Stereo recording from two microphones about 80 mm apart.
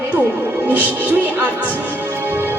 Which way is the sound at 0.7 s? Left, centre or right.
Right.